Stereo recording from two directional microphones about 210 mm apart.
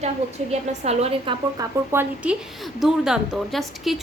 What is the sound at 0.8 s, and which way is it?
Speech, 30° right (ahead or behind).